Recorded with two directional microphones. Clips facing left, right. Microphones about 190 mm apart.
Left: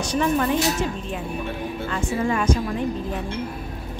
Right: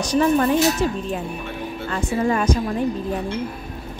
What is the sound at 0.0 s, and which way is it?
Speech, 40° right (ahead or behind).